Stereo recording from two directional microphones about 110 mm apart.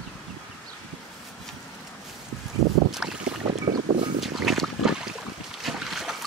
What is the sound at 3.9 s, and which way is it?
Boat, 90° right.